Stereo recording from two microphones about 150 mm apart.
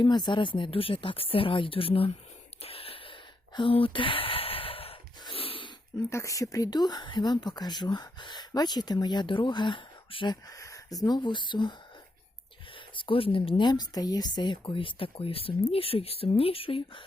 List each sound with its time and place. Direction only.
0.0 s speech: 30° left (ahead or behind)
2.6 s a sound: 40° left (ahead or behind)
6.1 s speech: 20° left (ahead or behind); by 10.3 s 35° left (ahead or behind)
10.5 s speech: 20° left (ahead or behind)
13.0 s speech: 35° left (ahead or behind)